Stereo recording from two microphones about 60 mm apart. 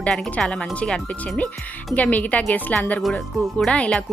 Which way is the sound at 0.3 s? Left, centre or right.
Centre.